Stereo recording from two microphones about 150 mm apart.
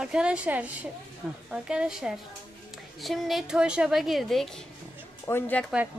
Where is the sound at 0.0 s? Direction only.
5° right (ahead or behind).